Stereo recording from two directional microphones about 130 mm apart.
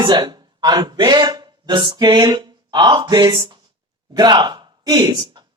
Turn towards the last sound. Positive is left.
turn(degrees=-35)  # may be behind; listen again after turning